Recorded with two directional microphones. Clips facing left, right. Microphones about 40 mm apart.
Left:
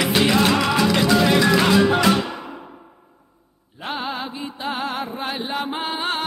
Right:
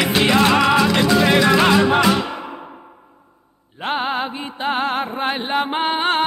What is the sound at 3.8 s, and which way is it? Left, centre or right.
Music, right.